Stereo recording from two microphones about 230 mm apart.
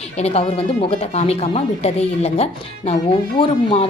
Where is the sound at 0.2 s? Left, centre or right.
Left.